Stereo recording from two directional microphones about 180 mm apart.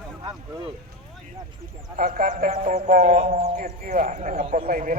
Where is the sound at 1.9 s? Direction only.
50° right (ahead or behind).